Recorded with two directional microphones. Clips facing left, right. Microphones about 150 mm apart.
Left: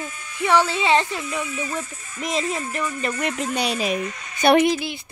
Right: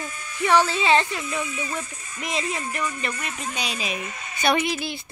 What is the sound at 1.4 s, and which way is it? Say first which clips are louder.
Music: left 2 dB; 20° right (ahead or behind).